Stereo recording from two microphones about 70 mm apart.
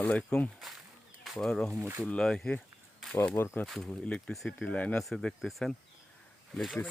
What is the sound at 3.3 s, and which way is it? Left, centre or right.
Speech, left.